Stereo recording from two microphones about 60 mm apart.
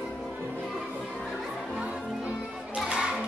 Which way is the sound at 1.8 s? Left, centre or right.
Centre.